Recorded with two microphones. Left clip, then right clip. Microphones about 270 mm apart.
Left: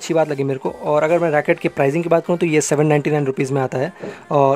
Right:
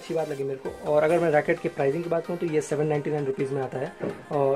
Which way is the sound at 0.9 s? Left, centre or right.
Left.